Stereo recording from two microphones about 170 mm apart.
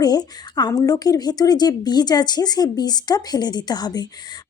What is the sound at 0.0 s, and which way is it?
A woman's voice, 25° left (ahead or behind).